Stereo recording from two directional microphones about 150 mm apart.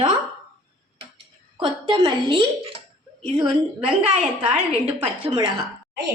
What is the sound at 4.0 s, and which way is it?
Speech, 45° right (ahead or behind).